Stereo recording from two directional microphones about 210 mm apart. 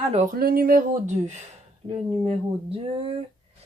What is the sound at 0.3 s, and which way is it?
Speech, 45° right (ahead or behind).